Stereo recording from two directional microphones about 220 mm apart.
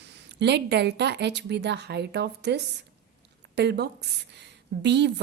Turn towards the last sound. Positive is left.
turn(degrees=-50)  # may be behind; listen again after turning